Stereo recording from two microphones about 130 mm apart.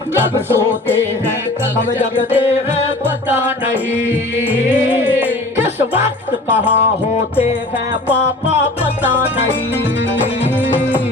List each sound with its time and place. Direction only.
2.3 s music: 15° right (ahead or behind)
8.8 s music: 15° right (ahead or behind)
10.4 s music: 15° right (ahead or behind)